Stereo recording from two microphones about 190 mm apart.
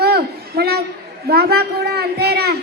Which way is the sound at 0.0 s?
55° right (ahead or behind).